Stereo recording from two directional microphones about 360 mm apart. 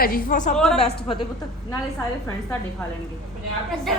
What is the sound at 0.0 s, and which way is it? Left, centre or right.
Speech, left.